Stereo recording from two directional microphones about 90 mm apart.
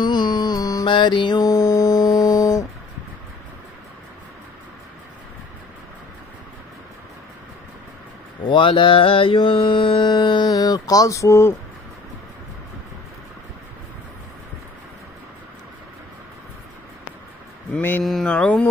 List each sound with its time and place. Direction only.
0.0 s music: 55° left (ahead or behind)
0.8 s music: 60° left (ahead or behind)
1.5 s music: 35° left (ahead or behind)
8.5 s mantra: 65° left (ahead or behind); by 10.0 s 90° left
10.0 s music: 60° left (ahead or behind)
10.4 s a sound: 45° left (ahead or behind)
17.7 s speech: 20° left (ahead or behind)
18.0 s mantra: 5° left (ahead or behind)